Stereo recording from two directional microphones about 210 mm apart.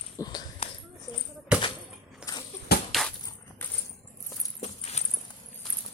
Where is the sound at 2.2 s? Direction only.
5° right (ahead or behind).